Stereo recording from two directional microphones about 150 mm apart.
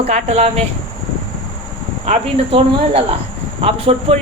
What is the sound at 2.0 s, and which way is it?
Speech, 40° right (ahead or behind).